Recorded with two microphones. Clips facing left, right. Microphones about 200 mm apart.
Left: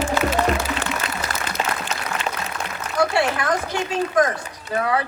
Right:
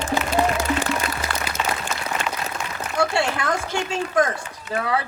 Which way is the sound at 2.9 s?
25° right (ahead or behind).